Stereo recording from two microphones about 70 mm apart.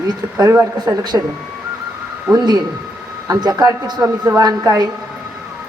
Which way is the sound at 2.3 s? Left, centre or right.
Right.